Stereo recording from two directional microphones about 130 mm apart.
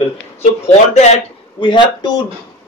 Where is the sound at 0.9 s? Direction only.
60° left (ahead or behind).